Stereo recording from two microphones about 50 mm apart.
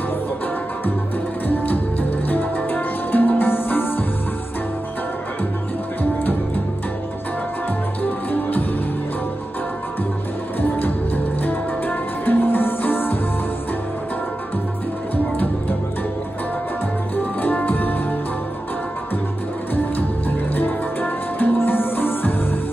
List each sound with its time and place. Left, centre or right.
1.5 s music: left
8.0 s music: left
11.4 s music: left
17.1 s music: left
20.5 s music: left